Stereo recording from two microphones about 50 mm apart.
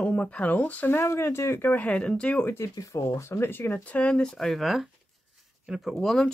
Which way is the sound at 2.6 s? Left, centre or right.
Left.